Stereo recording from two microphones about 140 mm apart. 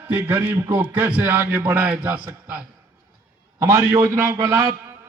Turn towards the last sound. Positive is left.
turn(degrees=-20)  # may be behind; listen again after turning